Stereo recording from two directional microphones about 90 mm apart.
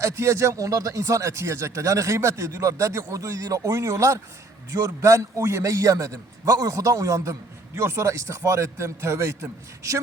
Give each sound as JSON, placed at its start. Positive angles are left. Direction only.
{"t": 0.0, "sound": "speech", "side_deg": -35}